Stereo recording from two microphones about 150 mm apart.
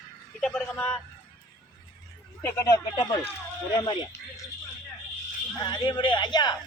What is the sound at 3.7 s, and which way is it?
Speech, 30° left (ahead or behind).